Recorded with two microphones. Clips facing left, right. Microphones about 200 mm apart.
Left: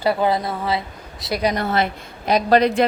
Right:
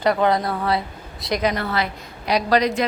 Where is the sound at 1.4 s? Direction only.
40° left (ahead or behind).